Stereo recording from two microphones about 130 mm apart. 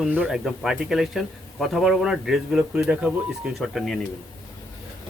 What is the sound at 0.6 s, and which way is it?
A man's voice, 5° right (ahead or behind).